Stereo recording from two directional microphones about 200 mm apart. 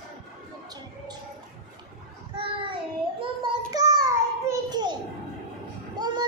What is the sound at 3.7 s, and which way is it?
Child singing, 20° right (ahead or behind).